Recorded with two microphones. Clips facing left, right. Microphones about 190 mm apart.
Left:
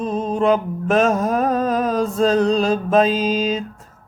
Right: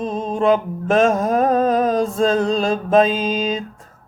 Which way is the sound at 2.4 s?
45° right (ahead or behind).